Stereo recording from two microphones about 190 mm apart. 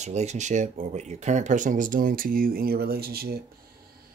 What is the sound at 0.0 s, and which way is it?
Speech, 35° right (ahead or behind).